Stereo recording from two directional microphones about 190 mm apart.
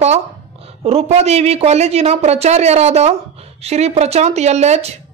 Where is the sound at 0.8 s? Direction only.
35° right (ahead or behind).